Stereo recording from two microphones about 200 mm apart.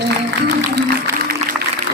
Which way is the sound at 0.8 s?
55° right (ahead or behind).